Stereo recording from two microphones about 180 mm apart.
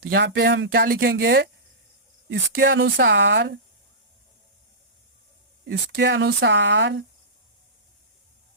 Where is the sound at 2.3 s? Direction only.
85° right.